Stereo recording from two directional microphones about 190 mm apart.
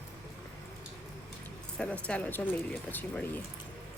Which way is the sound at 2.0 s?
5° left (ahead or behind).